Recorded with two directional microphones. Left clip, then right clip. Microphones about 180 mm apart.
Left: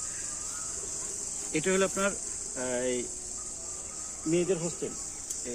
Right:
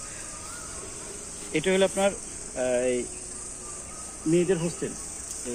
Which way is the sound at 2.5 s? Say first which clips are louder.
Right 6 dB; 70° left (ahead or behind).